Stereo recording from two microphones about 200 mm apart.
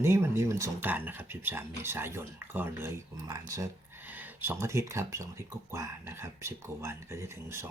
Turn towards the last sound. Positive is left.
turn(degrees=-15)  # may be behind; listen again after turning